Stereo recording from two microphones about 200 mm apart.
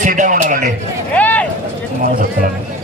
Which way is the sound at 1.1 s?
5° left (ahead or behind).